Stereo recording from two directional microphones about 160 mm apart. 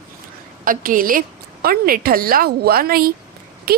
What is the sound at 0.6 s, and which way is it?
A woman's voice, 60° right (ahead or behind).